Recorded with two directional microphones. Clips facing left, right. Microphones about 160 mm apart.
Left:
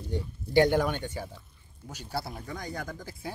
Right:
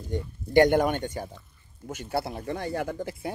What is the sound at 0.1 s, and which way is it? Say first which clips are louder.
Speech: right 3 dB; 50° right (ahead or behind).